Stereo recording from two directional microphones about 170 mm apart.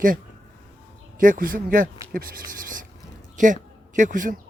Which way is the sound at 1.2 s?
55° right (ahead or behind).